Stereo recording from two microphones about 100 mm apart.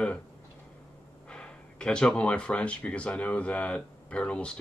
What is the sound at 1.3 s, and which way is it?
Speech, 10° left (ahead or behind).